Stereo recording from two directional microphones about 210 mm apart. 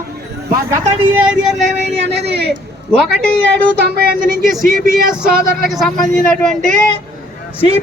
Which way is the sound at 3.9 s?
45° right (ahead or behind).